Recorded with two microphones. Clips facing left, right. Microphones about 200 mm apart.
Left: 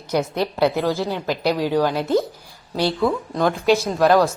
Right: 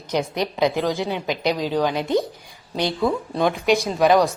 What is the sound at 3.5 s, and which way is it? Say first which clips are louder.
Speech: left 2 dB; centre (ahead or behind).